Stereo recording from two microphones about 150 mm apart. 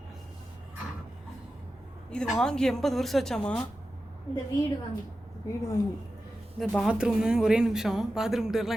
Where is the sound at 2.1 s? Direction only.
5° left (ahead or behind).